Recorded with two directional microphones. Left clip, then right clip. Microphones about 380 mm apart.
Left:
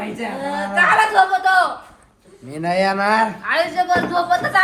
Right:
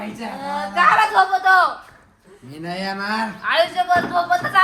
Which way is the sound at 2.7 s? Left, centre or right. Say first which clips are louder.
Left 9 dB; centre.